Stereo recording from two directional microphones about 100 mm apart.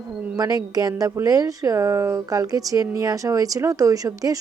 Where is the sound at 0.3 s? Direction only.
40° right (ahead or behind).